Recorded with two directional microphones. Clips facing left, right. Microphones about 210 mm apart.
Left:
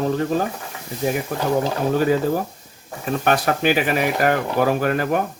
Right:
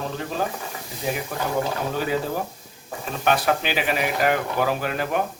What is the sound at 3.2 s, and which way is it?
Speech, 50° left (ahead or behind).